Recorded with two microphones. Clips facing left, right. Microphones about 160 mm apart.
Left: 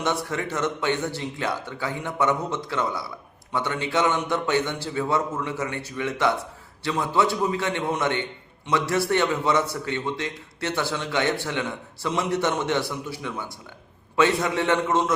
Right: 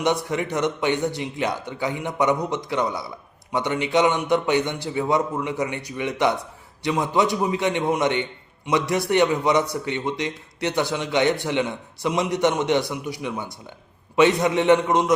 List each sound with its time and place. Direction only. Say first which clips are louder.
0.0 s a man's voice: right 4 dB; 15° right (ahead or behind)